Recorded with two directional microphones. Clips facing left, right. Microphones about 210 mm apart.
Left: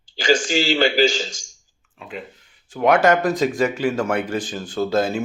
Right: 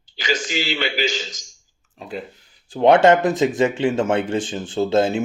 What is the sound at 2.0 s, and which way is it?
Speech, 35° right (ahead or behind).